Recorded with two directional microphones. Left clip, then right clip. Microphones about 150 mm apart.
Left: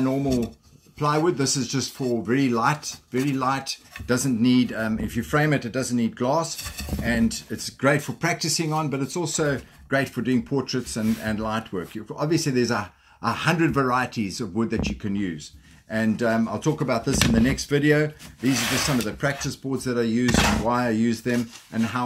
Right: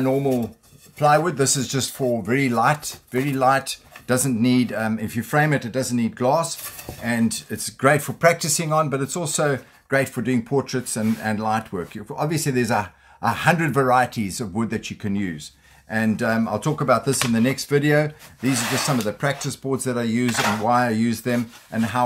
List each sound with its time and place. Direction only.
0.9 s speech: 50° right (ahead or behind)